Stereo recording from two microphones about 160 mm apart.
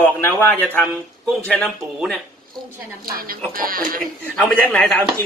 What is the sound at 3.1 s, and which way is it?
Speech, 65° right (ahead or behind).